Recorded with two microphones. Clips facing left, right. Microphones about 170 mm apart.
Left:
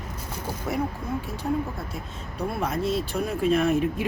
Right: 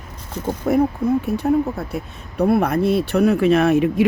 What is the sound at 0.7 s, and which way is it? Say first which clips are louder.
Speech: right 12 dB; 55° right (ahead or behind).